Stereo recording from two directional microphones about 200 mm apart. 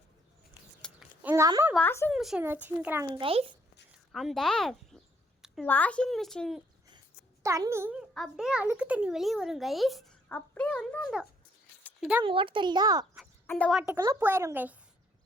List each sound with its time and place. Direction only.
0.8 s a sound: 5° right (ahead or behind)
1.7 s speech: 10° left (ahead or behind)
2.1 s speech: centre (ahead or behind)
3.1 s a child's voice: 25° right (ahead or behind)
4.1 s a child's voice: centre (ahead or behind)
7.4 s speech: 15° right (ahead or behind)
8.1 s a child's voice: centre (ahead or behind)
11.8 s a sound: 5° left (ahead or behind)
12.2 s a child's voice: 25° right (ahead or behind)
13.5 s a child's voice: 5° left (ahead or behind)
13.9 s speech: 15° right (ahead or behind)